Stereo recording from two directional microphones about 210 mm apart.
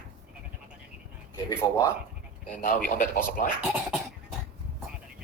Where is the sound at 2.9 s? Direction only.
40° left (ahead or behind).